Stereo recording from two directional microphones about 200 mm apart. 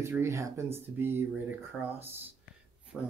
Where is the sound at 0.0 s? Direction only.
15° right (ahead or behind).